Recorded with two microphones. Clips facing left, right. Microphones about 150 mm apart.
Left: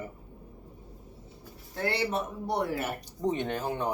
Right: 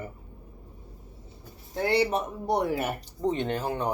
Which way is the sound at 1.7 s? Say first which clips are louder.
Right 5 dB; 15° right (ahead or behind).